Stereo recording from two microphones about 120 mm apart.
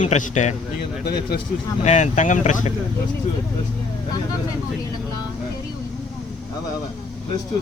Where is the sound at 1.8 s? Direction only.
70° left (ahead or behind).